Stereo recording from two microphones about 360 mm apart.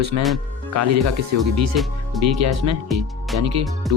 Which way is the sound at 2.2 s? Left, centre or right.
Right.